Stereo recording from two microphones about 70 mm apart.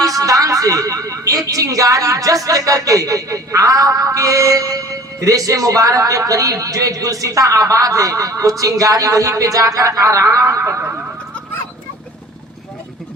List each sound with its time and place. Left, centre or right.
0.0 s a man's voice: right